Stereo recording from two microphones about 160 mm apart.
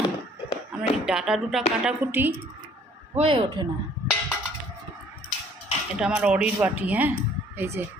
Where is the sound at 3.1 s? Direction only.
35° right (ahead or behind).